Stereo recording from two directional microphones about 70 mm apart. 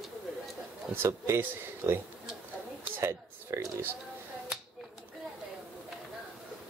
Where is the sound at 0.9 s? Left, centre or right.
Right.